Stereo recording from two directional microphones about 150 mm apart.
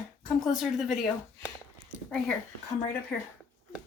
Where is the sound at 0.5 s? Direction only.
Centre (ahead or behind).